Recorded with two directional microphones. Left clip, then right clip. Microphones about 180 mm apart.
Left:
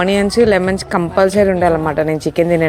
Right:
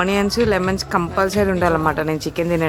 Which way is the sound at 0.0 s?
20° left (ahead or behind).